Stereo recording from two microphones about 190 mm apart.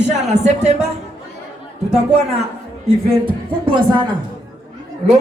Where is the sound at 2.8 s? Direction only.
25° right (ahead or behind).